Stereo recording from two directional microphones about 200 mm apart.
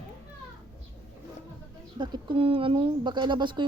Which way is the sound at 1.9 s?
25° right (ahead or behind).